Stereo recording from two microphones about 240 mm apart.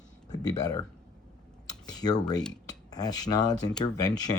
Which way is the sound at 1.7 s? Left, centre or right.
Centre.